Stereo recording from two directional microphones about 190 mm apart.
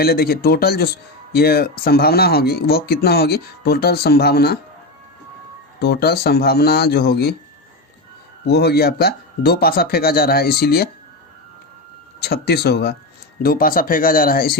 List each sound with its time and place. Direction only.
0.0 s speech: 55° left (ahead or behind)
5.8 s speech: 55° left (ahead or behind)
8.4 s speech: 60° left (ahead or behind)
12.2 s speech: 60° left (ahead or behind)